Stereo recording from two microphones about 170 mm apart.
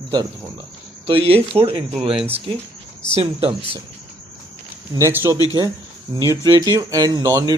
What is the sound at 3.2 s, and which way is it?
Speech, 35° right (ahead or behind).